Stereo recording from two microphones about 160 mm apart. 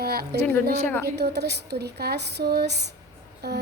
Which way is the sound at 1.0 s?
90° right.